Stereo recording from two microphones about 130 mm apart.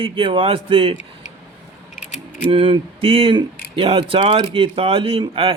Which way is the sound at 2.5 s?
45° right (ahead or behind).